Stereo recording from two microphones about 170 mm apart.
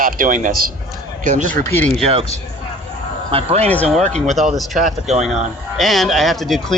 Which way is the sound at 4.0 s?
40° right (ahead or behind).